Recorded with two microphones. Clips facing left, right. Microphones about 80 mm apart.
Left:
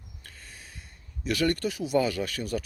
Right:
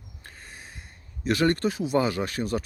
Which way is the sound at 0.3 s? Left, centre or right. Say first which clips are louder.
Right 4 dB; right.